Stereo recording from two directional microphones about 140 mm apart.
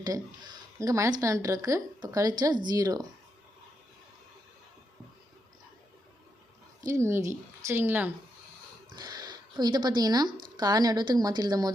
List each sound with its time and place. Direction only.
0.8 s a woman's voice: 20° right (ahead or behind)
6.8 s a woman's voice: 20° right (ahead or behind)
9.0 s a woman's voice: 30° right (ahead or behind)